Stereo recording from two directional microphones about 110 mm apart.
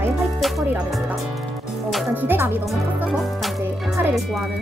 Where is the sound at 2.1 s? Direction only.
20° right (ahead or behind).